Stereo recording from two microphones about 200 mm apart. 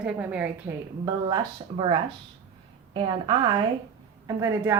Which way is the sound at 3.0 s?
25° right (ahead or behind).